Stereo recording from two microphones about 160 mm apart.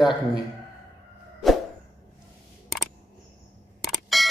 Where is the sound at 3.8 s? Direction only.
Centre (ahead or behind).